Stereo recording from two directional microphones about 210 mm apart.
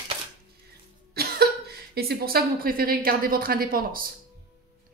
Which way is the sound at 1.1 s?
45° right (ahead or behind).